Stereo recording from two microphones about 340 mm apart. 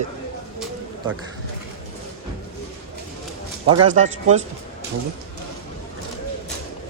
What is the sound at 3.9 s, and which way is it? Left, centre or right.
Speech, centre.